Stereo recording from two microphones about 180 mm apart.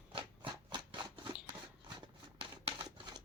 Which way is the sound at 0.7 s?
25° right (ahead or behind).